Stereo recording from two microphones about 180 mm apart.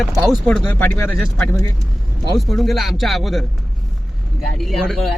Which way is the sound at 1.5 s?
20° left (ahead or behind).